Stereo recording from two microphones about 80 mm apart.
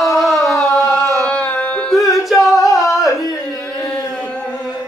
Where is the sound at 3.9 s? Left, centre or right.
Centre.